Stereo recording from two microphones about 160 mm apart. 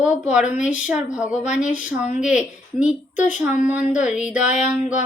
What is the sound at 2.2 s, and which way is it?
Speech, 5° right (ahead or behind).